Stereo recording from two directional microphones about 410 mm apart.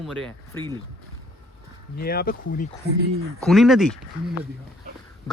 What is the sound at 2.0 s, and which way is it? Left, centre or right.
Speech, left.